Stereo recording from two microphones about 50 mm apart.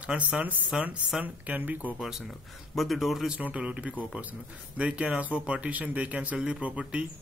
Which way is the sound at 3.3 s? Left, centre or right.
Right.